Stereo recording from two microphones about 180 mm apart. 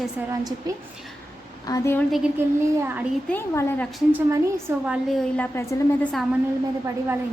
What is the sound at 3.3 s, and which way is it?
Speech, 15° left (ahead or behind).